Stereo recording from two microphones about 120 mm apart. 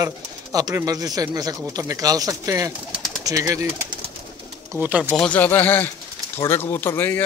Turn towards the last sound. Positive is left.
turn(degrees=20)  # may be behind; listen again after turning